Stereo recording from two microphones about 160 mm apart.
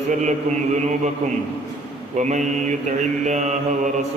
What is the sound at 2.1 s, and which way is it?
Mantra, 45° right (ahead or behind).